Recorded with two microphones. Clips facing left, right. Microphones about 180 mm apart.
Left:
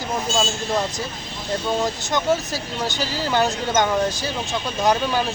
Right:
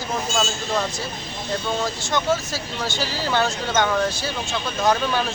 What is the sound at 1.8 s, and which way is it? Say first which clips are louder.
Speech: left 1 dB; 15° left (ahead or behind).